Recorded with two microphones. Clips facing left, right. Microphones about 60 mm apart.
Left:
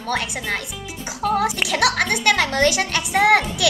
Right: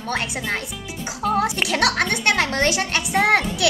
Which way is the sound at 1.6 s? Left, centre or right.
Right.